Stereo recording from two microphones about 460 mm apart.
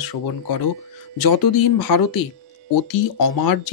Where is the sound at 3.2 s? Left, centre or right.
Left.